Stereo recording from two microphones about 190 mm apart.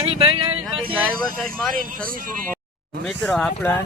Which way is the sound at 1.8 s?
45° right (ahead or behind).